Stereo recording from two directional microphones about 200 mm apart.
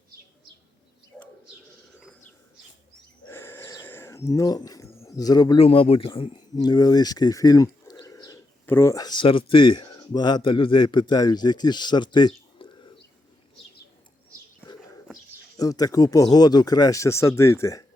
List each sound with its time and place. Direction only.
3.2 s speech: 10° left (ahead or behind)
15.5 s speech: 20° left (ahead or behind)